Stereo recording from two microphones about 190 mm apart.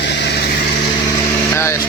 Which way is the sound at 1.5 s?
15° left (ahead or behind).